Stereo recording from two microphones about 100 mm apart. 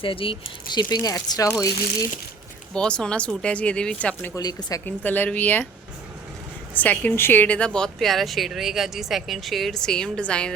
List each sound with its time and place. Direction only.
0.0 s speech: 60° left (ahead or behind)
0.8 s speech: 45° left (ahead or behind)
2.7 s speech: 10° left (ahead or behind)
4.4 s speech: 40° left (ahead or behind)
4.9 s speech: 20° left (ahead or behind)
6.7 s speech: 15° left (ahead or behind)